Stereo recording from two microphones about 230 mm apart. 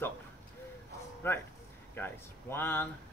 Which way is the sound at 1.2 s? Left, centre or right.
Centre.